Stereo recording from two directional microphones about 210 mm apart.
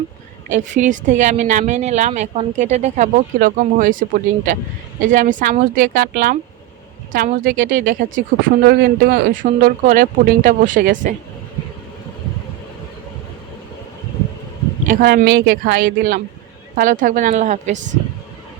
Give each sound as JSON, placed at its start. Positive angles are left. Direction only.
{"t": 0.4, "sound": "speech", "side_deg": -35}
{"t": 14.8, "sound": "speech", "side_deg": -45}